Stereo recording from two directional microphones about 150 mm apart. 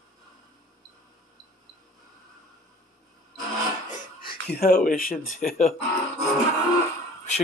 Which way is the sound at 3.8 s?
55° left (ahead or behind).